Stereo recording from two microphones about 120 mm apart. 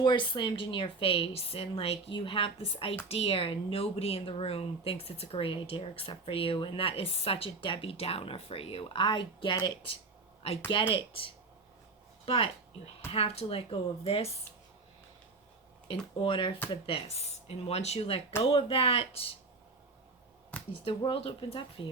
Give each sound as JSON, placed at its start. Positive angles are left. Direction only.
{"t": 0.0, "sound": "speech", "side_deg": 40}
{"t": 15.9, "sound": "speech", "side_deg": 45}
{"t": 17.7, "sound": "speech", "side_deg": 60}
{"t": 20.8, "sound": "speech", "side_deg": 45}